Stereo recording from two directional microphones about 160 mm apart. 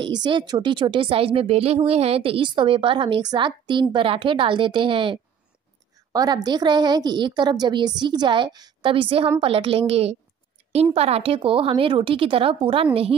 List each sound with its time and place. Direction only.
0.0 s a woman's voice: 30° right (ahead or behind)